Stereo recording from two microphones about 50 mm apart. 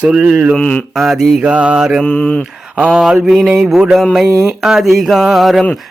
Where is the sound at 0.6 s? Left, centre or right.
Centre.